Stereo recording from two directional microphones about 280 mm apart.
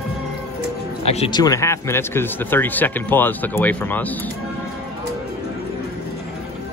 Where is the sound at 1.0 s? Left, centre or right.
Left.